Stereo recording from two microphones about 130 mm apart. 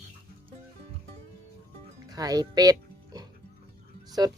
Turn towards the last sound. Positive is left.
turn(degrees=-35)  # may be behind; listen again after turning